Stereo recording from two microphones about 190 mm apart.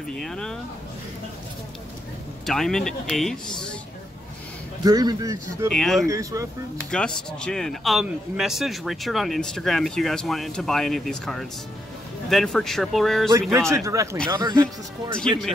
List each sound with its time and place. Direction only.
0.1 s a man's voice: centre (ahead or behind)
2.4 s a man's voice: centre (ahead or behind)
4.8 s speech: 20° right (ahead or behind)
5.7 s a man's voice: centre (ahead or behind)
6.0 s speech: 15° right (ahead or behind)
6.9 s a man's voice: 5° left (ahead or behind)
13.3 s speech: 15° right (ahead or behind)